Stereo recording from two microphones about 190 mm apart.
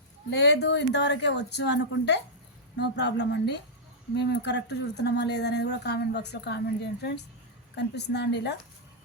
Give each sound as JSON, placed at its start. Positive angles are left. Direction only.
{"t": 0.3, "sound": "speech", "side_deg": 60}